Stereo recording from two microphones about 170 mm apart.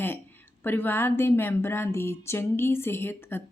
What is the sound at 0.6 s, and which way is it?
A woman's voice, 10° left (ahead or behind).